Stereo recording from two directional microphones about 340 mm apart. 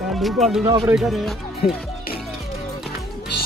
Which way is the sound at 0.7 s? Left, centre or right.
Centre.